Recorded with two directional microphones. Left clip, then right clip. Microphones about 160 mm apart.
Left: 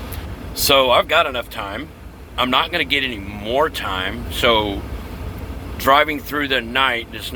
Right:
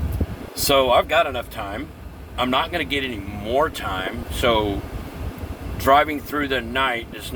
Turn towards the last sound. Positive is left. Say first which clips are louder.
# left 4 dB
turn(degrees=-10)  # may be behind; listen again after turning